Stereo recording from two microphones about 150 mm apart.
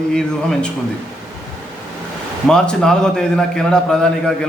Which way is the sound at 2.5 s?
5° left (ahead or behind).